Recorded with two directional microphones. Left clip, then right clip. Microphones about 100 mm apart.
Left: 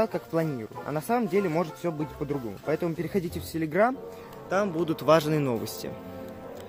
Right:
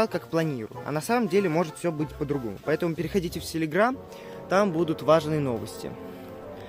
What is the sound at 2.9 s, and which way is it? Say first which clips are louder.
Speech: right 2 dB; 5° right (ahead or behind).